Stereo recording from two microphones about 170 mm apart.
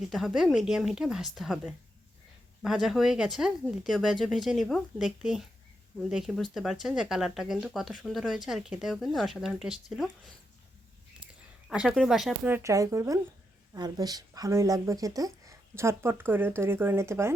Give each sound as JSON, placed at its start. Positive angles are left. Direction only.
{"t": 0.1, "sound": "speech", "side_deg": 0}
{"t": 11.7, "sound": "speech", "side_deg": -5}